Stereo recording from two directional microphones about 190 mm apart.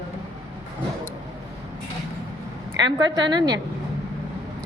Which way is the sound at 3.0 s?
25° right (ahead or behind).